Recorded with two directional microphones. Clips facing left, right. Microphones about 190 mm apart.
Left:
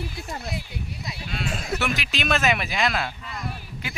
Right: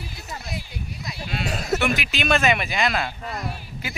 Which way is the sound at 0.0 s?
60° left (ahead or behind).